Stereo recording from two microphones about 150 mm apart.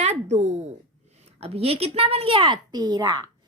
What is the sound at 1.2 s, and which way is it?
A woman's voice, 45° right (ahead or behind).